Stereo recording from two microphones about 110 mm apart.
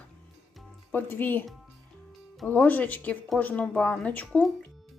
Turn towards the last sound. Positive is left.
turn(degrees=10)  # may be behind; listen again after turning